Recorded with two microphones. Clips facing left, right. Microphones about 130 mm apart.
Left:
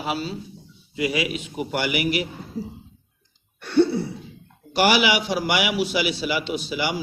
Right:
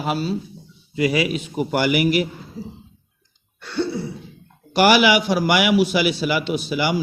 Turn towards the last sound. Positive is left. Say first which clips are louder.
# right 4 dB
turn(degrees=-50)  # may be behind; listen again after turning